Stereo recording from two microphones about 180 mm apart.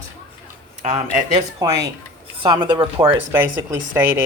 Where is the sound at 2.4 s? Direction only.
25° right (ahead or behind).